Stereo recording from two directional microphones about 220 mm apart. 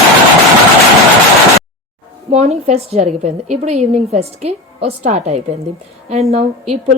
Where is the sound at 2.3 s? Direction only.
30° right (ahead or behind).